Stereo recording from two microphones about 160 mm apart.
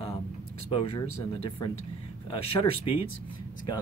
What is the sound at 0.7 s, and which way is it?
Speech, 35° left (ahead or behind).